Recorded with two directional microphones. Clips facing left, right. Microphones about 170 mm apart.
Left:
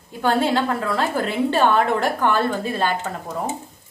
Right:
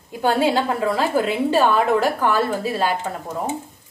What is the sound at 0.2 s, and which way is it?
A woman's voice, 10° right (ahead or behind).